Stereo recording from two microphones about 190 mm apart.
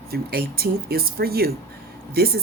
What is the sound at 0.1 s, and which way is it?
A woman's voice, 55° right (ahead or behind).